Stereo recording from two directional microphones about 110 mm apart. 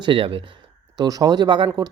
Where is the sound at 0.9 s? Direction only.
35° right (ahead or behind).